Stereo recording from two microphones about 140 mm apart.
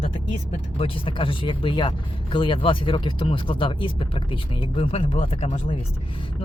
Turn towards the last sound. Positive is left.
turn(degrees=45)  # may be behind; listen again after turning